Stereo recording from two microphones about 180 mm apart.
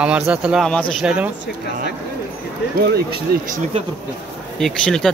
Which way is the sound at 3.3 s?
55° right (ahead or behind).